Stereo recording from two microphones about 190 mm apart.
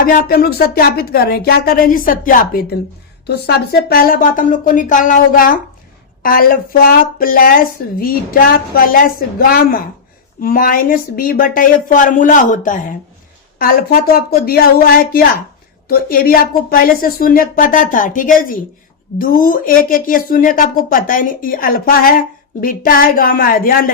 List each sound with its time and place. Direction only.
0.0 s a woman's voice: 50° left (ahead or behind)
3.2 s a woman's voice: 60° left (ahead or behind)